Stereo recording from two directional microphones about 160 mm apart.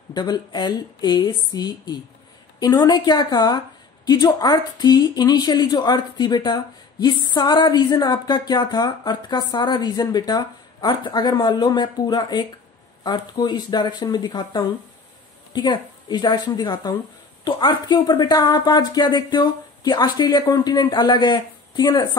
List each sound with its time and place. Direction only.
0.1 s a woman's voice: 25° left (ahead or behind)